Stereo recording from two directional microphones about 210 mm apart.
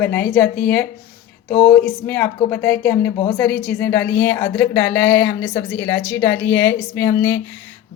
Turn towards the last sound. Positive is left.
turn(degrees=10)  # may be behind; listen again after turning